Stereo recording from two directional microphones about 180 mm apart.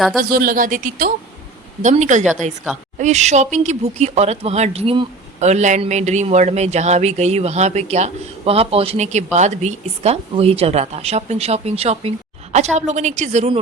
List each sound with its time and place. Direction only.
0.3 s speech: 55° right (ahead or behind)